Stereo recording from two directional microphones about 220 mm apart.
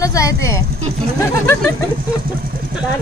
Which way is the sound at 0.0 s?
15° left (ahead or behind).